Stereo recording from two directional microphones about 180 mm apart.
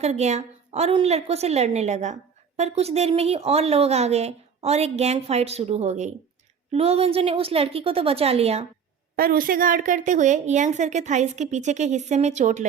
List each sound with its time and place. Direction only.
0.0 s a woman's voice: 40° right (ahead or behind)
9.1 s a woman's voice: 55° right (ahead or behind)